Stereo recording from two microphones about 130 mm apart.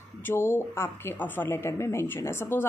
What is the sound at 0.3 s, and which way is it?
A woman's voice, 20° left (ahead or behind).